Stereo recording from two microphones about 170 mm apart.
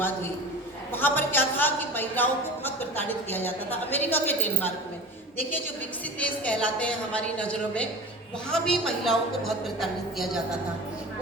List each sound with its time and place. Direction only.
0.9 s a woman's voice: 10° left (ahead or behind)
6.1 s a woman's voice: 10° left (ahead or behind)